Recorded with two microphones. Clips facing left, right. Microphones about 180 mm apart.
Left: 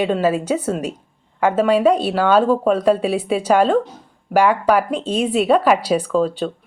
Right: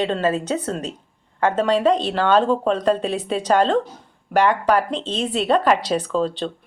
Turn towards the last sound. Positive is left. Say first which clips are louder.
# left 3 dB
turn(degrees=10)  # may be behind; listen again after turning